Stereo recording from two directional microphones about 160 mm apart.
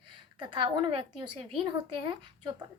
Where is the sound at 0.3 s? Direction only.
30° right (ahead or behind).